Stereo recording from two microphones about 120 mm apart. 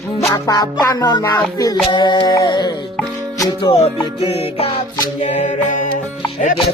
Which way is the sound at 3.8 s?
60° left (ahead or behind).